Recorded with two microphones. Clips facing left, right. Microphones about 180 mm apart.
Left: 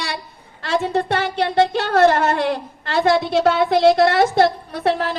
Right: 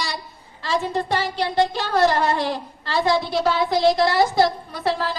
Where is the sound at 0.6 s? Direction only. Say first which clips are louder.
Left 3 dB; 70° left (ahead or behind).